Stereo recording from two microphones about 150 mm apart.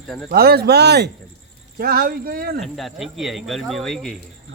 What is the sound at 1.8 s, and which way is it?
Speech, 80° right.